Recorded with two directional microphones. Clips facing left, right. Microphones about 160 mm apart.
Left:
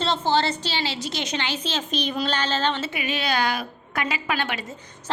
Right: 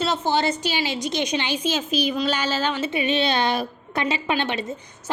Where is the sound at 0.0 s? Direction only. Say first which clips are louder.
Even; 10° right (ahead or behind).